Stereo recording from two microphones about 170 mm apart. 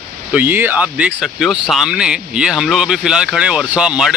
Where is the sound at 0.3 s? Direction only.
10° right (ahead or behind).